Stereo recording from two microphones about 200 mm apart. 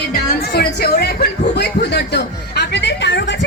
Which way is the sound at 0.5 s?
50° left (ahead or behind).